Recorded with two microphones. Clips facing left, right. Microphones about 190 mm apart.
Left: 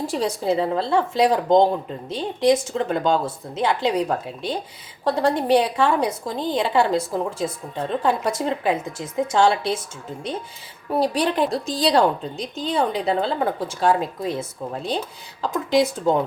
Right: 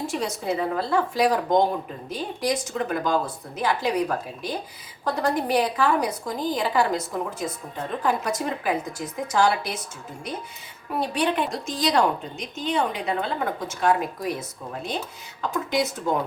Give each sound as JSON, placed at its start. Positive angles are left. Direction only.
{"t": 0.1, "sound": "a woman's voice", "side_deg": 30}
{"t": 5.0, "sound": "a woman's voice", "side_deg": 30}
{"t": 10.9, "sound": "a woman's voice", "side_deg": 35}